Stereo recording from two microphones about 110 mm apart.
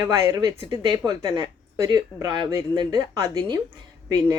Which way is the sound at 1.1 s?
45° right (ahead or behind).